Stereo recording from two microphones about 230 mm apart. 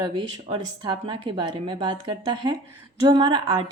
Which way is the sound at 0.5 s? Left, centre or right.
Right.